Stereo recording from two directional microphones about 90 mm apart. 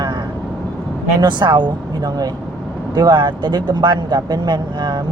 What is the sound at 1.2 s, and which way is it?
Speech, 55° right (ahead or behind).